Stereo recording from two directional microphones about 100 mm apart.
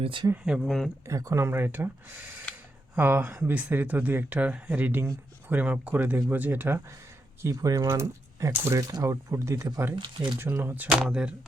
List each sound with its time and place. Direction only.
0.0 s speech: 60° right (ahead or behind)
0.4 s speech: 10° right (ahead or behind)
1.0 s speech: 30° right (ahead or behind)
2.9 s speech: 15° right (ahead or behind)
7.4 s speech: 35° right (ahead or behind)
8.8 s speech: 35° right (ahead or behind)
9.9 s speech: 50° right (ahead or behind)
10.3 s speech: 20° right (ahead or behind)
11.1 s speech: 10° right (ahead or behind)